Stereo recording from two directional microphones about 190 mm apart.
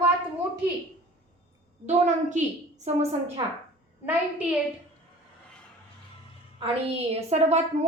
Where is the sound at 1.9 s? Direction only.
40° right (ahead or behind).